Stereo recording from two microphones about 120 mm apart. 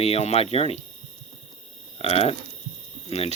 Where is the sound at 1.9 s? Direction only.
55° left (ahead or behind).